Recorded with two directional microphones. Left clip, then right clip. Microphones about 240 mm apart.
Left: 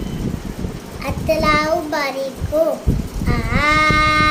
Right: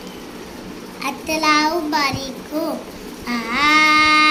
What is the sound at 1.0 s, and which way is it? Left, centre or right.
A child's voice, centre.